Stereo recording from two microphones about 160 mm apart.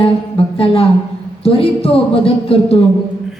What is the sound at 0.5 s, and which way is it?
Speech, 35° left (ahead or behind).